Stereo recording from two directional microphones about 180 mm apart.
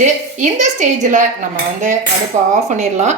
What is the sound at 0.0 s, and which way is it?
Speech, 45° right (ahead or behind).